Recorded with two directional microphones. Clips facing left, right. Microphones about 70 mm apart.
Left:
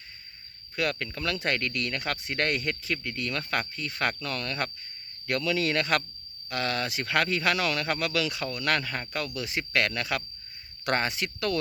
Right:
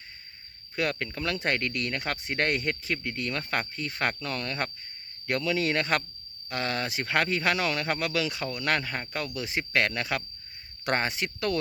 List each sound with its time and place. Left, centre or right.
0.8 s speech: right